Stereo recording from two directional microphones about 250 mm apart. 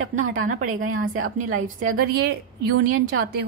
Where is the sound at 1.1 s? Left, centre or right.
Right.